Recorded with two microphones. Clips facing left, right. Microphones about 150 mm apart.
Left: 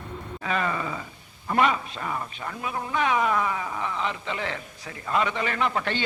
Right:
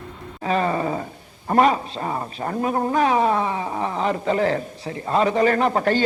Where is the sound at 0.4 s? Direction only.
35° right (ahead or behind).